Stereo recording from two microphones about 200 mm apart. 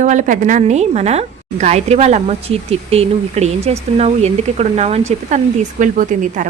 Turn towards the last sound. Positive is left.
turn(degrees=-40)  # may be behind; listen again after turning